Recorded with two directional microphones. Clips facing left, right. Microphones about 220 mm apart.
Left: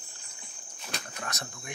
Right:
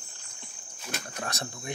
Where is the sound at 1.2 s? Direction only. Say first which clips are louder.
Right 4 dB; 30° right (ahead or behind).